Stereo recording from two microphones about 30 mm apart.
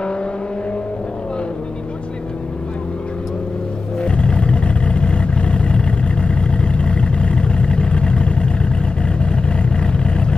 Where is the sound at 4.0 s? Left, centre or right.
Left.